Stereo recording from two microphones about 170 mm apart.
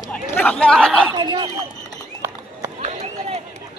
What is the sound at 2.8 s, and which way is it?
Run, 40° right (ahead or behind).